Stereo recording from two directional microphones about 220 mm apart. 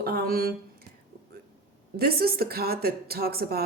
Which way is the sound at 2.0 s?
45° right (ahead or behind).